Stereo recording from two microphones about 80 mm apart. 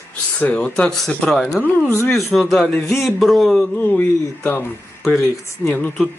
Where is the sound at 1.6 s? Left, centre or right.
Centre.